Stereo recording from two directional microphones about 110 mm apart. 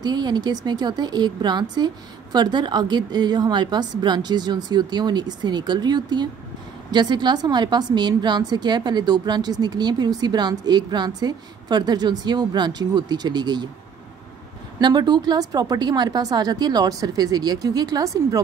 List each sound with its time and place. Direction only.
0.0 s a woman's voice: 40° right (ahead or behind)
14.8 s a woman's voice: 40° right (ahead or behind)